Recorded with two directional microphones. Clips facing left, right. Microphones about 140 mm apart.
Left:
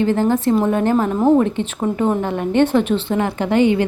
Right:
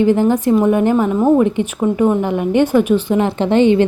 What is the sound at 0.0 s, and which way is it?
A woman's voice, 15° right (ahead or behind).